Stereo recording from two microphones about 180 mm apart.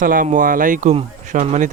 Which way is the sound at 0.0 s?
50° right (ahead or behind).